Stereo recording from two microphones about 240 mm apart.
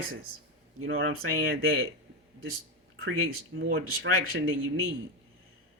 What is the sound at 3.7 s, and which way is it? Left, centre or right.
Speech, right.